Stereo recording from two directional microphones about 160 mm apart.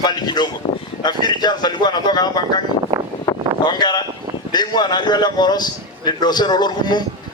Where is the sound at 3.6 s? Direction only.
25° left (ahead or behind).